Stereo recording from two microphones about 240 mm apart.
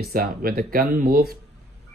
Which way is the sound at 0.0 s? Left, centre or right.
Right.